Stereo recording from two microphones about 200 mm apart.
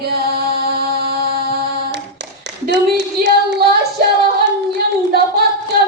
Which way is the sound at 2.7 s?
60° right (ahead or behind).